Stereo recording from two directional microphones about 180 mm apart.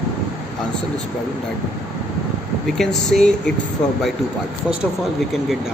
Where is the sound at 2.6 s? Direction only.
Centre (ahead or behind).